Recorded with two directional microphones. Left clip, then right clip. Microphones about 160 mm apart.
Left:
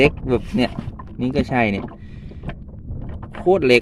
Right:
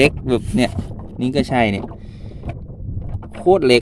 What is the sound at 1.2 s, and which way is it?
Speech, 25° right (ahead or behind).